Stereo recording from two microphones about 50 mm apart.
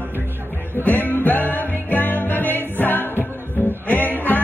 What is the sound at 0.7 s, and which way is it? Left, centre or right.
Music, left.